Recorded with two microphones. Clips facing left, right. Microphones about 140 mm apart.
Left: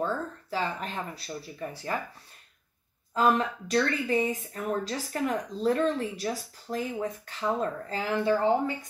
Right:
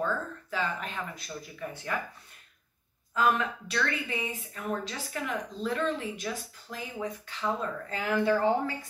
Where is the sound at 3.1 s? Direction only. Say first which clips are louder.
Left 2 dB; 35° left (ahead or behind).